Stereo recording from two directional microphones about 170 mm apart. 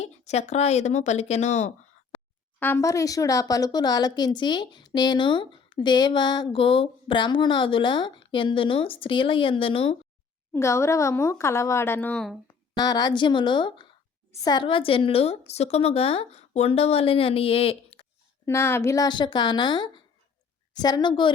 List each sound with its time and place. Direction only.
0.0 s speech: 40° left (ahead or behind)
2.6 s speech: 15° left (ahead or behind); by 10.0 s 35° left (ahead or behind)
10.5 s a woman's voice: 15° left (ahead or behind)
12.5 s speech: 25° left (ahead or behind)
18.4 s speech: 15° left (ahead or behind)